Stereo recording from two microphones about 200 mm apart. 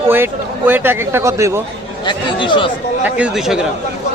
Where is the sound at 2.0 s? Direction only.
25° left (ahead or behind).